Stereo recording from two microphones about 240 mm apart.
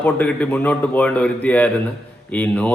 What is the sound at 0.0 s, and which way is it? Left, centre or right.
A man's voice, centre.